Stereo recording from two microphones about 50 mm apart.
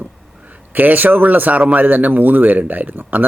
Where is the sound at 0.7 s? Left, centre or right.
Right.